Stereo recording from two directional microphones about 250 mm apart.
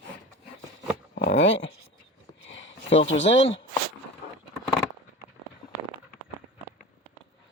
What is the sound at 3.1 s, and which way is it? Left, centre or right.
Speech, left.